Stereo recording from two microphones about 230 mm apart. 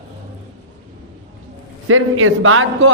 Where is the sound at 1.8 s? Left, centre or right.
Right.